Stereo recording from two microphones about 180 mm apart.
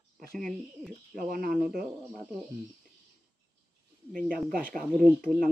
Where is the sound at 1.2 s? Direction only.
50° right (ahead or behind).